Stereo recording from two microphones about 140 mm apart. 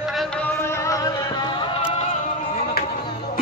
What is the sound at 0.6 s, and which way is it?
Music, 20° left (ahead or behind).